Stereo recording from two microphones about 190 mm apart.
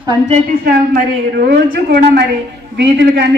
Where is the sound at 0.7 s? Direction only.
50° right (ahead or behind).